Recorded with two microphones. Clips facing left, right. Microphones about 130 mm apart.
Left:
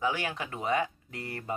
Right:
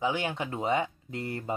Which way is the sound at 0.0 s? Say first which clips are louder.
Right 2 dB; 20° right (ahead or behind).